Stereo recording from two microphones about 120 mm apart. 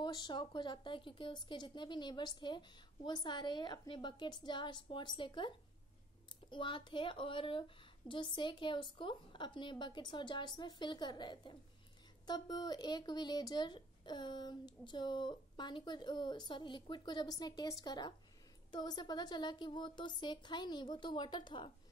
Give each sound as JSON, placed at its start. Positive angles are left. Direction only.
{"t": 0.0, "sound": "speech", "side_deg": 40}
{"t": 6.5, "sound": "speech", "side_deg": 40}